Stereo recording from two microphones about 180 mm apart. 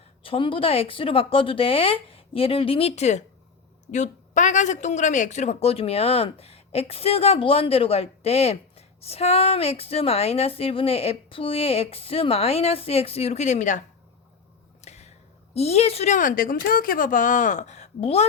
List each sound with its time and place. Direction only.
0.2 s speech: 30° left (ahead or behind)
14.8 s a sound: 40° left (ahead or behind)
15.5 s speech: 35° left (ahead or behind)